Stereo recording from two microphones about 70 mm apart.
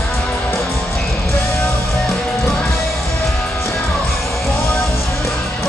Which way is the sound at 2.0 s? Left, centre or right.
Centre.